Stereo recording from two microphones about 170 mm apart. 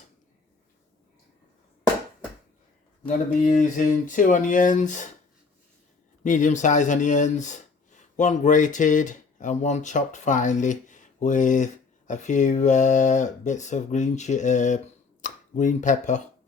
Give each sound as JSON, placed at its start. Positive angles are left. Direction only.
{"t": 3.4, "sound": "speech", "side_deg": 45}
{"t": 6.2, "sound": "speech", "side_deg": 45}